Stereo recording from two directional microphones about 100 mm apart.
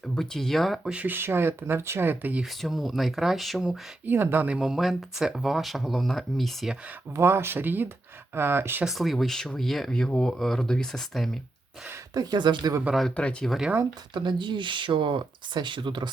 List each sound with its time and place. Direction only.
0.1 s speech: 5° left (ahead or behind)
0.9 s speech: 20° right (ahead or behind)
2.4 s speech: centre (ahead or behind)
4.0 s speech: 20° right (ahead or behind)
4.5 s speech: 5° right (ahead or behind)
7.2 s speech: 25° right (ahead or behind)
8.8 s speech: centre (ahead or behind)
12.1 s speech: 40° right (ahead or behind)
13.0 s speech: 10° left (ahead or behind)
13.5 s speech: 5° right (ahead or behind)
14.1 s speech: 50° right (ahead or behind)